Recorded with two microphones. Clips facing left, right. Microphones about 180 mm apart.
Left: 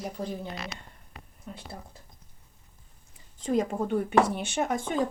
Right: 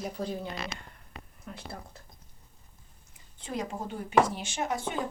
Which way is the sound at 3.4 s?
50° left (ahead or behind).